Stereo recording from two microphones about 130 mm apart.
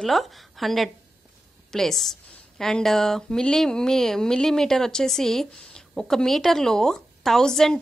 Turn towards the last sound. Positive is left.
turn(degrees=5)  # may be behind; listen again after turning